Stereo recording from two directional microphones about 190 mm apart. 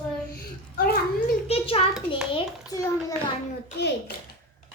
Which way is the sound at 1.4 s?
30° left (ahead or behind).